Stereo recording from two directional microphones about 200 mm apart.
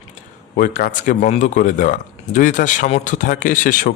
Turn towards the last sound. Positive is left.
turn(degrees=40)  # may be behind; listen again after turning